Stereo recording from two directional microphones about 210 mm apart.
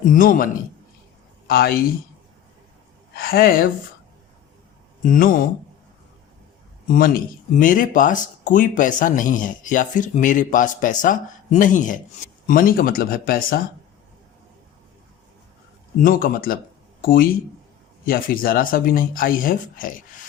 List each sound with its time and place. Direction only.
0.0 s speech: 40° left (ahead or behind)
3.2 s speech: 45° left (ahead or behind)
5.0 s speech: 40° left (ahead or behind)
6.8 s speech: 40° left (ahead or behind)
16.0 s speech: 40° left (ahead or behind)